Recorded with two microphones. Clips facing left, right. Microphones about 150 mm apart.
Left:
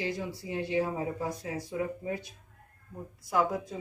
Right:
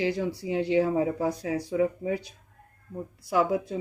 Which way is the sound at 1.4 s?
80° right.